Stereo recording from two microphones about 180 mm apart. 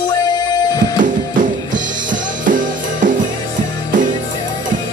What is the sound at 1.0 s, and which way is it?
Music, 45° right (ahead or behind).